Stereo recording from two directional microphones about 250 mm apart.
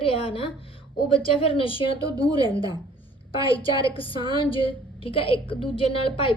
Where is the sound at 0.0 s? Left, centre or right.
Left.